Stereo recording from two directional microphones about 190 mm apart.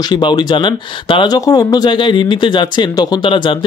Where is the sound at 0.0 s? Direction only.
25° left (ahead or behind).